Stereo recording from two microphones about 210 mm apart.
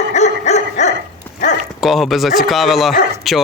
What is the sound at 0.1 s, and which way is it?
Dog, 30° left (ahead or behind).